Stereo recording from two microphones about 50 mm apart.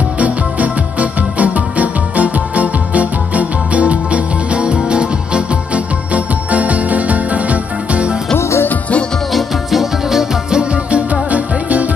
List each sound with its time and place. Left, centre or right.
0.2 s music: right
8.4 s music: left
9.3 s music: centre
10.6 s music: right